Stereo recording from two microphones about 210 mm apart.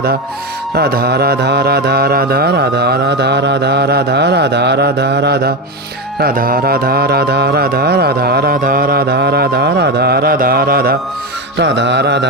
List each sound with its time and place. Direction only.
0.8 s music: 50° right (ahead or behind)
11.6 s music: 55° right (ahead or behind)